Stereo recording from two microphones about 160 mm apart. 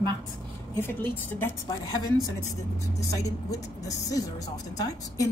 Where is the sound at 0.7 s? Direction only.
15° left (ahead or behind).